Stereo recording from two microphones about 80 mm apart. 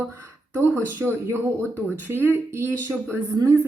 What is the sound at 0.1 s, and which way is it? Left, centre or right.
Speech, right.